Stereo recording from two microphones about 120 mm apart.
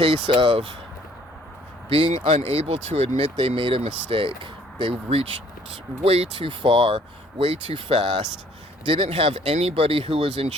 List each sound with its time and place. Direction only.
0.0 s speech: 55° right (ahead or behind)
1.9 s speech: 50° right (ahead or behind)
3.4 s speech: 50° right (ahead or behind)